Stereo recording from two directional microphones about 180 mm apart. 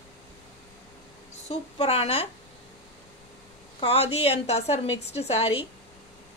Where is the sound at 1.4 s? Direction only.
35° left (ahead or behind).